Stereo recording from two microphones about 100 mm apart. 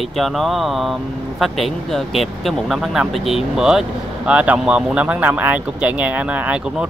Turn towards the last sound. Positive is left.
turn(degrees=-10)  # may be behind; listen again after turning